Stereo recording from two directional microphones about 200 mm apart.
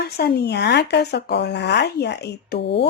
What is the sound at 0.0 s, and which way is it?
Speech, 50° left (ahead or behind).